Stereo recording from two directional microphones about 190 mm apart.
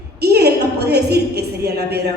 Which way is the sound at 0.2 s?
60° right (ahead or behind).